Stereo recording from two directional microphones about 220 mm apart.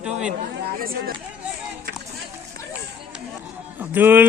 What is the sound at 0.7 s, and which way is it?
Speech, 40° right (ahead or behind).